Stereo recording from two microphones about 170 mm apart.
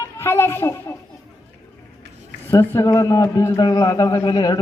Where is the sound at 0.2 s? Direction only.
15° left (ahead or behind).